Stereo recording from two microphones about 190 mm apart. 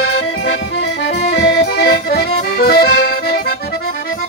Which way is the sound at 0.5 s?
65° left (ahead or behind).